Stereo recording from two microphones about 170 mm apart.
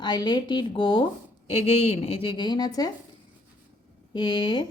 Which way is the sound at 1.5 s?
40° left (ahead or behind).